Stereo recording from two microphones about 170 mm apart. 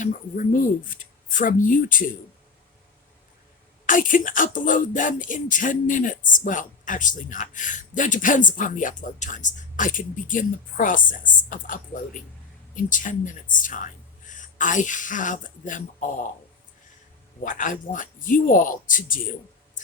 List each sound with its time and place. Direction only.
0.0 s music: 50° left (ahead or behind)
3.8 s music: 50° left (ahead or behind)
17.4 s music: 50° left (ahead or behind)